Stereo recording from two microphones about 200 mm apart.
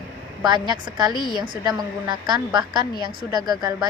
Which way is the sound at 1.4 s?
20° right (ahead or behind).